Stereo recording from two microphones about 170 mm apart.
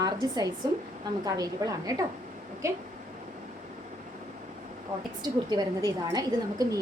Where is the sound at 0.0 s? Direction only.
20° right (ahead or behind).